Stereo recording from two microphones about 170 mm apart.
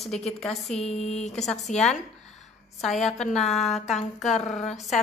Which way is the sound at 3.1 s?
45° left (ahead or behind).